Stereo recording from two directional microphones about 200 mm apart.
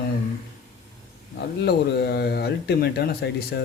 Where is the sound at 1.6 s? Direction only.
55° left (ahead or behind).